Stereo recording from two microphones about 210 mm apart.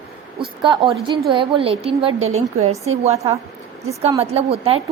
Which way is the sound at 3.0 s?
30° right (ahead or behind).